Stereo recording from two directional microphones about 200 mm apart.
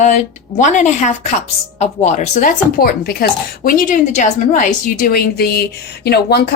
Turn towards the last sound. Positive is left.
turn(degrees=55)  # may be behind; listen again after turning